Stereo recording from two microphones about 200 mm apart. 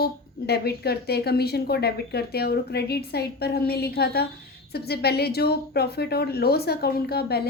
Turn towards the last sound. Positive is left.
turn(degrees=50)  # may be behind; listen again after turning